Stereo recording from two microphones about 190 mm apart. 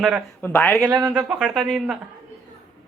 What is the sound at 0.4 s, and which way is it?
Speech, 10° left (ahead or behind).